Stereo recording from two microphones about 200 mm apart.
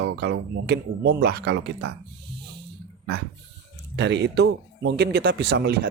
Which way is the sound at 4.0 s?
60° right (ahead or behind).